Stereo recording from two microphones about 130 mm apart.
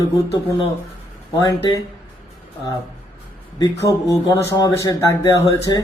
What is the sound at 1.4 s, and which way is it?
Speech, 35° left (ahead or behind).